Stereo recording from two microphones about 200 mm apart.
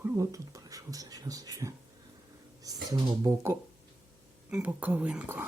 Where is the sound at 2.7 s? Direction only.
20° right (ahead or behind).